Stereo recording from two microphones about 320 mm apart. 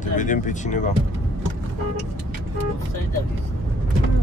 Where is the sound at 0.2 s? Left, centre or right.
Left.